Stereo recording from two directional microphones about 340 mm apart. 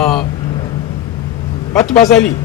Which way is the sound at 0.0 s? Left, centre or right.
Centre.